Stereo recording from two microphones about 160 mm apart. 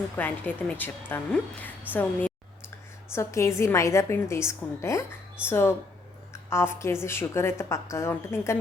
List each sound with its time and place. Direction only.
0.2 s a woman's voice: 10° left (ahead or behind)